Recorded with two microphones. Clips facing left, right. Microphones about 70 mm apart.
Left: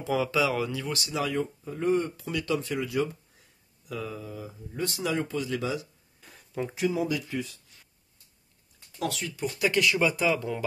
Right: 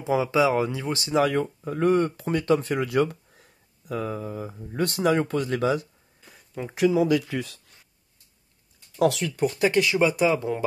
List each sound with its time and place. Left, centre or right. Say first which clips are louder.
0.0 s speech: right 5 dB; right
1.1 s speech: right 8 dB; right
2.2 s speech: right 7 dB; right
6.2 s a sound: left 1 dB; centre
6.7 s speech: right 8 dB; right
9.0 s speech: right 10 dB; right
9.6 s speech: right 3 dB; right